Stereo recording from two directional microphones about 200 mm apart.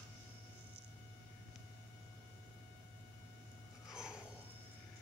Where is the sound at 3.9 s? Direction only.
5° right (ahead or behind).